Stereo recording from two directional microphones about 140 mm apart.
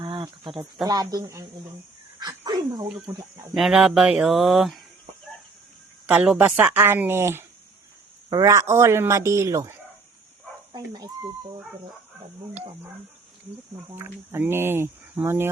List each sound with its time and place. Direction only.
0.0 s speech: 35° right (ahead or behind)
2.1 s a sound: 30° right (ahead or behind)
3.2 s a man's voice: 25° right (ahead or behind)
3.5 s speech: centre (ahead or behind)
6.1 s a man's voice: 10° right (ahead or behind); by 11.1 s 30° right (ahead or behind)
13.9 s speech: 15° right (ahead or behind)